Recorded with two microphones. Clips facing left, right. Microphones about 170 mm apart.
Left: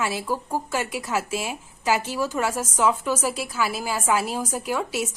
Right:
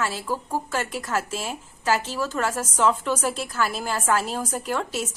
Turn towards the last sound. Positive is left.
turn(degrees=10)  # may be behind; listen again after turning